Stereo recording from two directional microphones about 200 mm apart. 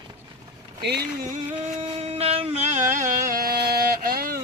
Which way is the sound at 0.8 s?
55° right (ahead or behind).